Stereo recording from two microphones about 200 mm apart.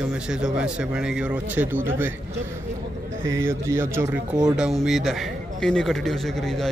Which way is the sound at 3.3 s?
15° right (ahead or behind).